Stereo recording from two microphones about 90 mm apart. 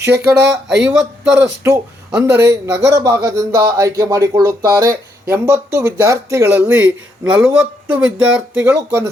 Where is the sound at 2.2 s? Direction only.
30° right (ahead or behind).